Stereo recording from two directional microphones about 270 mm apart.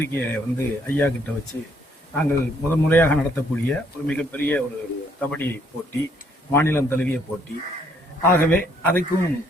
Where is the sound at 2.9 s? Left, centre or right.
Centre.